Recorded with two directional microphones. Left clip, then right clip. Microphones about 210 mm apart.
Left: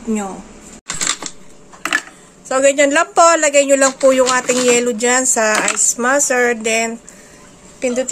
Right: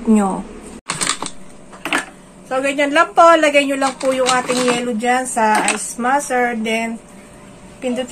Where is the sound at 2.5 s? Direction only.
55° left (ahead or behind).